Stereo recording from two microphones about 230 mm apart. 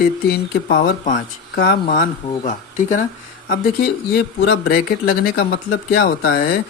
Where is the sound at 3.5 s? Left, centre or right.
Left.